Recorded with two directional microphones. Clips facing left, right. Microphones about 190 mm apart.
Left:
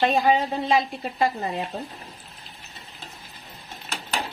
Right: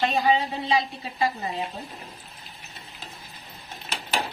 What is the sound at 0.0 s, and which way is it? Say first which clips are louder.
Speech: left 2 dB; 50° left (ahead or behind).